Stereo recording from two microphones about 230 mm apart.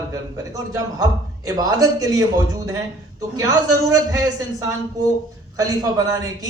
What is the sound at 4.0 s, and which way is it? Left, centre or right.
A man's voice, centre.